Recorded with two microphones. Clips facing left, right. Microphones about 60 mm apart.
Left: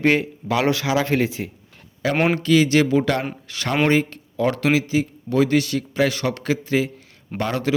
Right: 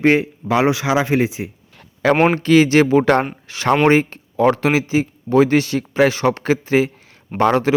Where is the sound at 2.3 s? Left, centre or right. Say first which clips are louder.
Right 4 dB; right.